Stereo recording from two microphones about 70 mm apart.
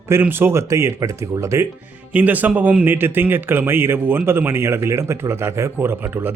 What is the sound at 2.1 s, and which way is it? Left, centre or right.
Speech, right.